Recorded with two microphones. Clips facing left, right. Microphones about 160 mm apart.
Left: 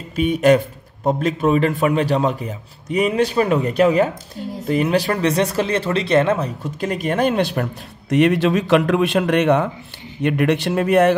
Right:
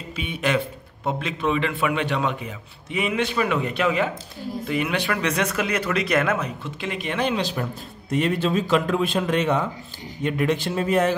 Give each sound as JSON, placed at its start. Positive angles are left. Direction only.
{"t": 0.1, "sound": "a man's voice", "side_deg": 45}
{"t": 8.1, "sound": "a man's voice", "side_deg": 80}